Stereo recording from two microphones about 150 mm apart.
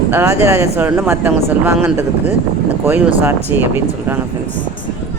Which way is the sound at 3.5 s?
15° right (ahead or behind).